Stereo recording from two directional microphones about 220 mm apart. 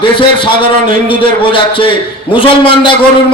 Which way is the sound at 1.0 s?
25° left (ahead or behind).